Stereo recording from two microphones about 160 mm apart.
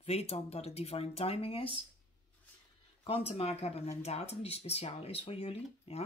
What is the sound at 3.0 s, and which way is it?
Speech, 35° left (ahead or behind).